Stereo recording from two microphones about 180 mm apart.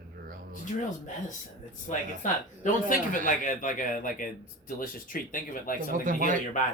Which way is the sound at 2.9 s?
45° left (ahead or behind).